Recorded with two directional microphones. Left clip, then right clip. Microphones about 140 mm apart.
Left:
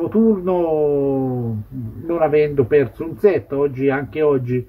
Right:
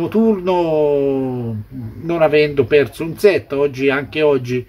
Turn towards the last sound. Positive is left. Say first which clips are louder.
# right 2 dB
turn(degrees=-20)  # may be behind; listen again after turning